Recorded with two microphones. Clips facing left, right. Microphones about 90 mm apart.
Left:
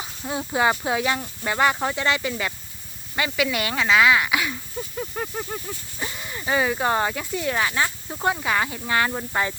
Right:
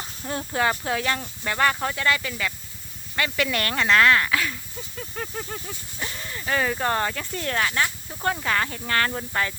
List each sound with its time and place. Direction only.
0.0 s speech: 10° left (ahead or behind)
3.2 s speech: 10° left (ahead or behind)